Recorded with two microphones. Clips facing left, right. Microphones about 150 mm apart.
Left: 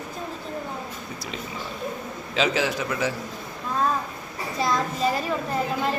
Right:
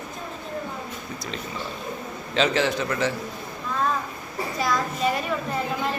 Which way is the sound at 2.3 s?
5° left (ahead or behind).